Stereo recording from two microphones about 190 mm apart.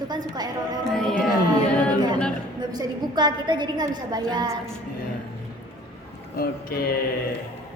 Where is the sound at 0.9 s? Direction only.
Centre (ahead or behind).